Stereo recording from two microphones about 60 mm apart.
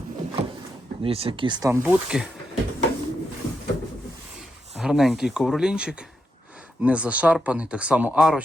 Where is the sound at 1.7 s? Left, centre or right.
Right.